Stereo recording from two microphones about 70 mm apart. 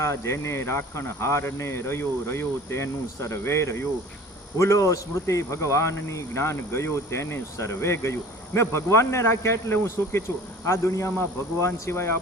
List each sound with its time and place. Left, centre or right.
0.0 s a man's voice: left